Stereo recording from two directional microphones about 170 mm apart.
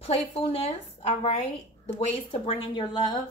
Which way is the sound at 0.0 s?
35° left (ahead or behind).